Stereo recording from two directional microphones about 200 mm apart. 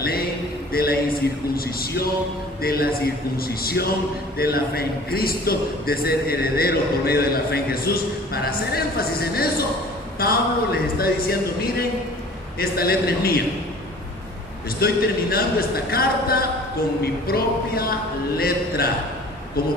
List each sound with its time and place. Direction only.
0.7 s a sound: 50° left (ahead or behind)
1.5 s a man's voice: 50° left (ahead or behind)
14.8 s a man's voice: 50° left (ahead or behind)